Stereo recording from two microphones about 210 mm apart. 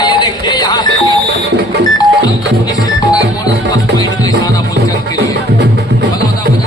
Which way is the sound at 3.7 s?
20° left (ahead or behind).